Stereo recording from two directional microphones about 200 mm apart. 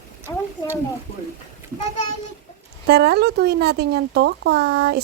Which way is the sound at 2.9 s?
55° right (ahead or behind).